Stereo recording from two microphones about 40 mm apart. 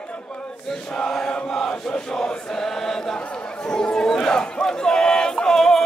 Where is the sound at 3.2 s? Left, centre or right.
Centre.